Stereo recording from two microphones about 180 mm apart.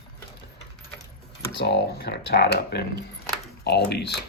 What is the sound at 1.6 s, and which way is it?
Speech, 65° left (ahead or behind).